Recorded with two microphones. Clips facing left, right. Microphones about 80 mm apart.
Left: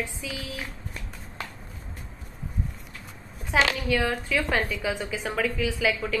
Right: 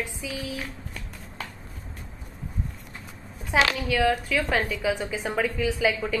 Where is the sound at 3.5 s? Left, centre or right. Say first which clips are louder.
Right 1 dB; centre.